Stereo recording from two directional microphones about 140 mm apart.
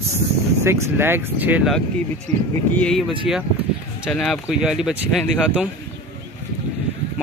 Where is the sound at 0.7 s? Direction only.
20° right (ahead or behind).